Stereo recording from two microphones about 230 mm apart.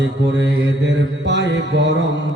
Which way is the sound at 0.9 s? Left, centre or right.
Right.